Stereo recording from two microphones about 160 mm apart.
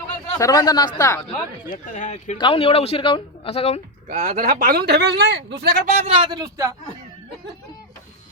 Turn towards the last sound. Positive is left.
turn(degrees=-20)  # may be behind; listen again after turning